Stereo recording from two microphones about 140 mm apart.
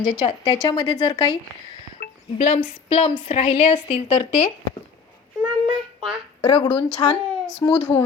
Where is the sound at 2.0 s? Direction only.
90° left.